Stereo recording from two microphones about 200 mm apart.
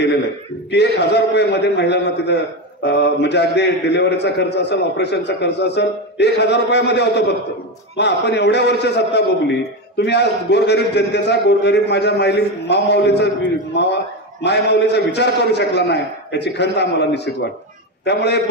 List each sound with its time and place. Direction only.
0.7 s a man's voice: 55° left (ahead or behind)